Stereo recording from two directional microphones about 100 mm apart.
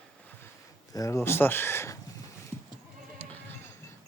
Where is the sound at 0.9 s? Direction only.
30° left (ahead or behind).